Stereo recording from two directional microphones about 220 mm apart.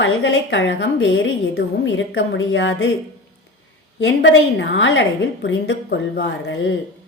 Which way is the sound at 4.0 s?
55° left (ahead or behind).